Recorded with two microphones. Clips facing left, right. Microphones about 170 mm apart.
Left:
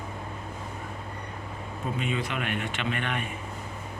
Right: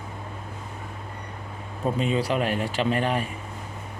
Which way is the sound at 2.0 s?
35° right (ahead or behind).